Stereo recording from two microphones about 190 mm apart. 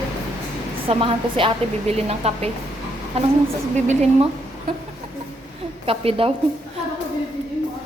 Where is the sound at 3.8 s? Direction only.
40° right (ahead or behind).